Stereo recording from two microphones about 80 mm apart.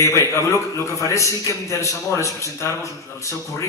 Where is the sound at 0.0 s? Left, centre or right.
Left.